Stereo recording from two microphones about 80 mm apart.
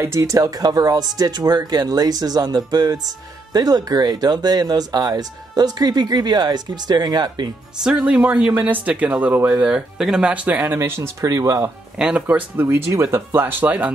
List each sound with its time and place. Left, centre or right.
0.2 s speech: right
7.8 s speech: centre; by 9.5 s right
9.5 s speech: centre
10.8 s speech: right
12.0 s speech: centre